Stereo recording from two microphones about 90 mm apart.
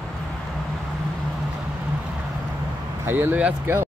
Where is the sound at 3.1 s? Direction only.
25° right (ahead or behind).